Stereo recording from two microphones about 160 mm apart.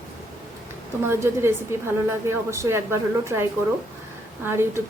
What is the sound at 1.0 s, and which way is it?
A woman's voice, 15° right (ahead or behind).